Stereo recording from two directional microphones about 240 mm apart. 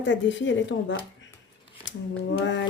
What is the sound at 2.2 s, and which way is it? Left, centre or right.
Speech, left.